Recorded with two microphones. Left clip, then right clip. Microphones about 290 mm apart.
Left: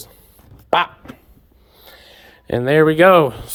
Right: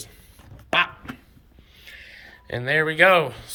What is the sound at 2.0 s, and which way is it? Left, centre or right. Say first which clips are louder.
Speech: left 11 dB; left.